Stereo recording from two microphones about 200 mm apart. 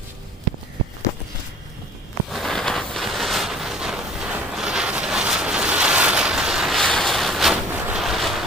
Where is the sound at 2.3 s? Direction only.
Centre (ahead or behind).